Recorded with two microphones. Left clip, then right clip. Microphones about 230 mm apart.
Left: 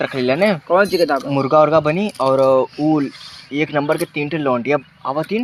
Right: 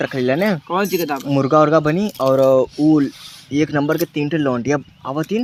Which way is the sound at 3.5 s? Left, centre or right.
Right.